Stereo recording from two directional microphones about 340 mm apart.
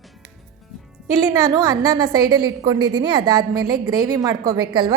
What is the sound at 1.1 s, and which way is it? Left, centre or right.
A woman's voice, centre.